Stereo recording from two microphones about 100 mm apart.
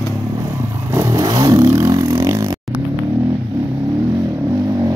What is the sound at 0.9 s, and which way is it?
Vehicle, 35° right (ahead or behind).